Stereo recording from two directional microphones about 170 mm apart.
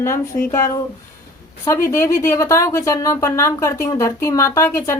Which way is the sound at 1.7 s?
15° left (ahead or behind).